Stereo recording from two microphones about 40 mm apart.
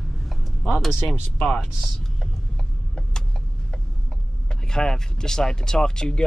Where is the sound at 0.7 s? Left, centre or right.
Centre.